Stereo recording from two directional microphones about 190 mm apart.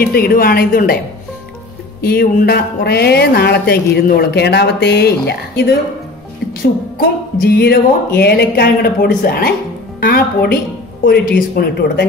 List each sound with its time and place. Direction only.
0.0 s speech: 55° left (ahead or behind)
2.0 s speech: 55° left (ahead or behind)
7.0 s speech: 55° left (ahead or behind)